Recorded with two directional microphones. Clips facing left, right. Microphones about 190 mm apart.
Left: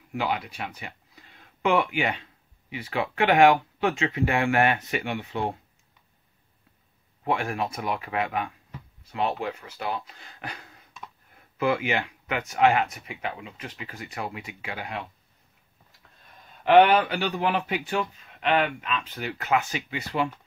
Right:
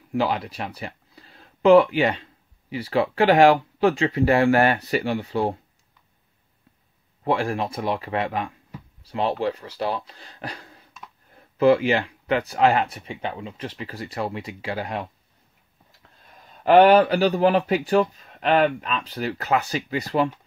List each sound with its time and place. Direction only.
0.1 s speech: 35° right (ahead or behind)
7.2 s speech: 35° right (ahead or behind)
16.6 s speech: 40° right (ahead or behind)